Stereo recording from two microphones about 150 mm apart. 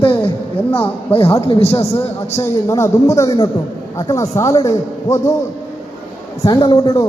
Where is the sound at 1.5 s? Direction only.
40° left (ahead or behind).